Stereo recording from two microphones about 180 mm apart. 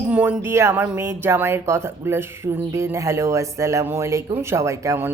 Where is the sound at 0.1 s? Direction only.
10° right (ahead or behind).